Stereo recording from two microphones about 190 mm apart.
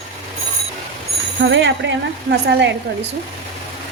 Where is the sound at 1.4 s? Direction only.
70° right (ahead or behind).